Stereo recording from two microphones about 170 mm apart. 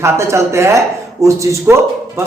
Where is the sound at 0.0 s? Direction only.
15° right (ahead or behind).